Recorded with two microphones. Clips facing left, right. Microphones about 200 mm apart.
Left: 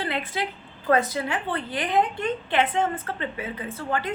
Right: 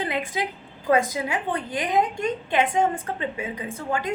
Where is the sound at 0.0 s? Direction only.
15° right (ahead or behind).